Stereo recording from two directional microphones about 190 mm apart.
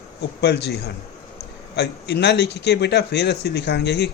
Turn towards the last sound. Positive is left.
turn(degrees=60)  # may be behind; listen again after turning